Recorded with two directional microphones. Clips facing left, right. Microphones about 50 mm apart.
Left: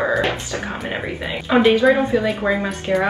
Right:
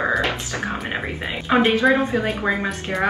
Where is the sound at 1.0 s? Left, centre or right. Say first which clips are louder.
Left 1 dB; right.